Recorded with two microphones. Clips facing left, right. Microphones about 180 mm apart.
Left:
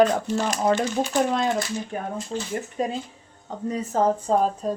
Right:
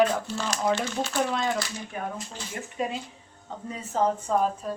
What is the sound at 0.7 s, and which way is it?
Speech, 15° left (ahead or behind).